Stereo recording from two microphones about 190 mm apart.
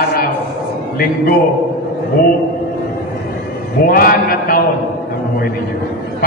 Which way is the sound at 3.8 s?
50° left (ahead or behind).